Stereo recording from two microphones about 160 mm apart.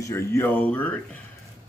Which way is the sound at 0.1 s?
15° left (ahead or behind).